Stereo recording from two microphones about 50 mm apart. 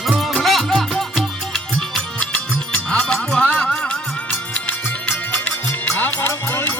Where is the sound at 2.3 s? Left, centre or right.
Centre.